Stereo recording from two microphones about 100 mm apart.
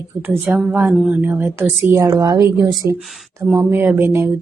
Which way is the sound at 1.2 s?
25° right (ahead or behind).